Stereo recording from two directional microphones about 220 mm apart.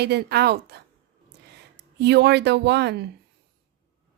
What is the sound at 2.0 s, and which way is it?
A woman's voice, 50° right (ahead or behind).